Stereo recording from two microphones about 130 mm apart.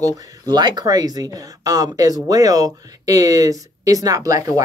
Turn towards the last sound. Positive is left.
turn(degrees=-25)  # may be behind; listen again after turning